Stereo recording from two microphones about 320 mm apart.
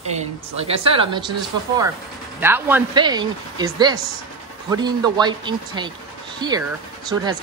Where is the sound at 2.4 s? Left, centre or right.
Centre.